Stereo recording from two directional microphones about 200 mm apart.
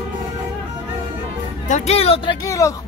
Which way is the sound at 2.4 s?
15° left (ahead or behind).